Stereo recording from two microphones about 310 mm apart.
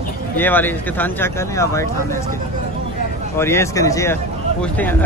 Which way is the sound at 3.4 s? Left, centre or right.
Centre.